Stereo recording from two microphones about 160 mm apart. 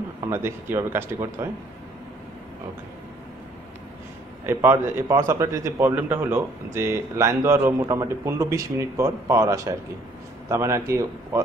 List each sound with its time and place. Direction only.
0.2 s speech: 15° right (ahead or behind)
4.5 s speech: 15° right (ahead or behind)